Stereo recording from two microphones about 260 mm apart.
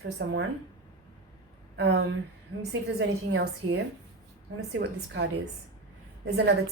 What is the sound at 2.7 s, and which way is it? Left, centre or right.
A woman's voice, right.